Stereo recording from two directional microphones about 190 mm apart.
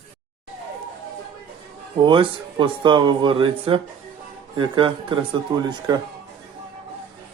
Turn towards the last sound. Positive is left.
turn(degrees=-25)  # may be behind; listen again after turning